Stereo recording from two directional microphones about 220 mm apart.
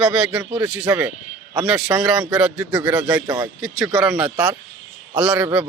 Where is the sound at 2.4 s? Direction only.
Centre (ahead or behind).